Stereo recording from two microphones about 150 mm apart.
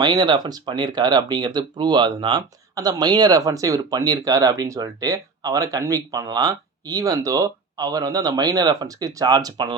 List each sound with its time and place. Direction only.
0.0 s speech: 25° right (ahead or behind)